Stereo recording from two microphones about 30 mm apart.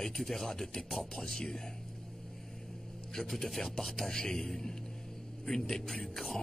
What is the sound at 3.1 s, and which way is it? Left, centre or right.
Speech, centre.